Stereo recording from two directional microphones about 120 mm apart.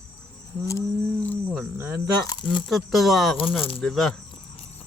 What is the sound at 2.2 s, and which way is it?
Speech, 35° left (ahead or behind).